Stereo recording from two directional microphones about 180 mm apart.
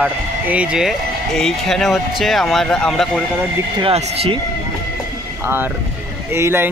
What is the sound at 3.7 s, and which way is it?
Speech, 30° right (ahead or behind).